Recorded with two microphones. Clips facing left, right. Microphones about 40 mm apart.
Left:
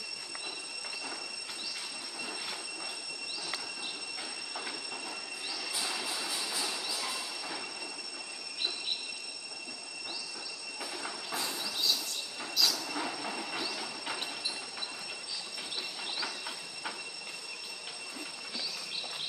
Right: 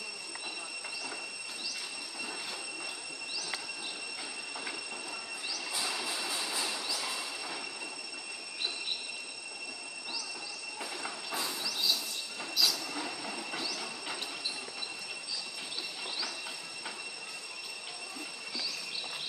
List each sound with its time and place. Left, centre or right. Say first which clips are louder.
5.7 s train: right 1 dB; centre
10.8 s train: even; centre
12.5 s train: even; centre
12.9 s train: left 2 dB; centre